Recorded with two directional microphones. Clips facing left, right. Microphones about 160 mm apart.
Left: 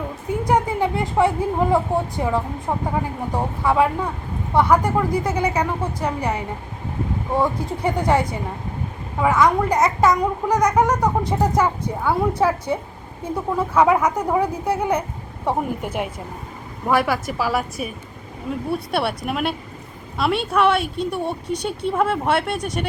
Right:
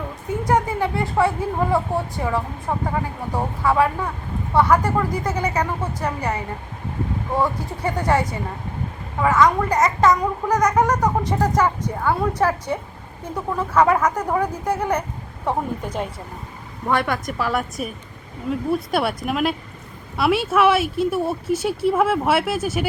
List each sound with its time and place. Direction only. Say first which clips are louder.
0.4 s a child's voice: left 1 dB; 15° left (ahead or behind); by 22.9 s 5° right (ahead or behind)